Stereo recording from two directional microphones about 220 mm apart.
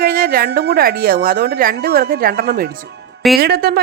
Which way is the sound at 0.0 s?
40° right (ahead or behind).